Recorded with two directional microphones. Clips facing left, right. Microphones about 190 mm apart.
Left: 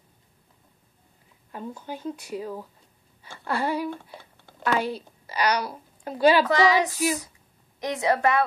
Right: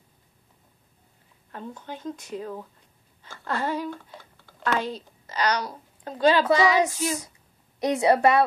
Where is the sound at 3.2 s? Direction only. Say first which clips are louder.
Left 1 dB; 10° left (ahead or behind).